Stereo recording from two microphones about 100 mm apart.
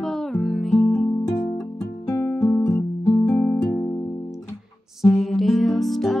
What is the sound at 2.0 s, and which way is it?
Music, 35° left (ahead or behind).